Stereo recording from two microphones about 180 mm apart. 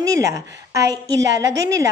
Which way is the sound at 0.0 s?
15° right (ahead or behind).